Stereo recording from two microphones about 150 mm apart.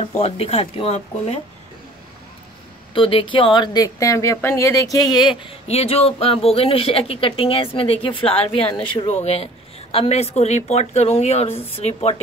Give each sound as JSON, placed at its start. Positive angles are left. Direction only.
{"t": 0.0, "sound": "a woman's voice", "side_deg": 45}
{"t": 2.9, "sound": "a woman's voice", "side_deg": 35}
{"t": 5.4, "sound": "a woman's voice", "side_deg": 40}